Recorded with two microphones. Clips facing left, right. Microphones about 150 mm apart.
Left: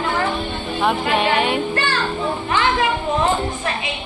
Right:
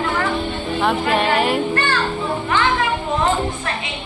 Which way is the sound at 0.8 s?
Centre (ahead or behind).